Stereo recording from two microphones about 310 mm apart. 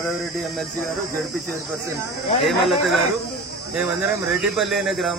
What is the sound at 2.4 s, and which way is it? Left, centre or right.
Speech, centre.